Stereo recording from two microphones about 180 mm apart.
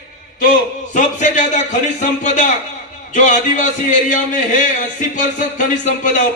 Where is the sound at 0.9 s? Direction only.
45° left (ahead or behind).